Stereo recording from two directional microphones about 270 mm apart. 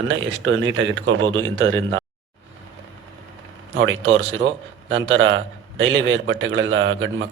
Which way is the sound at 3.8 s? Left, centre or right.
Right.